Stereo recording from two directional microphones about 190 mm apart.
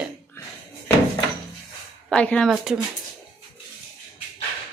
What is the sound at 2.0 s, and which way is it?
Speech, 5° left (ahead or behind).